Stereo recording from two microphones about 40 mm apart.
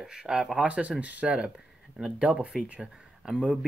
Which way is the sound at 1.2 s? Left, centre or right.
Right.